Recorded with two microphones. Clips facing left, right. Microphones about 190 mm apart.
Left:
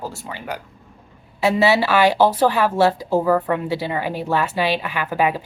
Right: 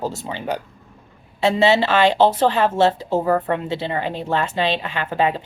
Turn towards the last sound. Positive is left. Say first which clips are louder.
# even
turn(degrees=10)  # may be behind; listen again after turning